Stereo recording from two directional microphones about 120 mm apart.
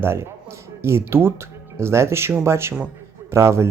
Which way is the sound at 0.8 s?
20° right (ahead or behind).